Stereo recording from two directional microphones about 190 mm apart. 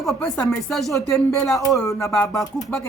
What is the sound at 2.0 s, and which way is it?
Speech, 15° left (ahead or behind).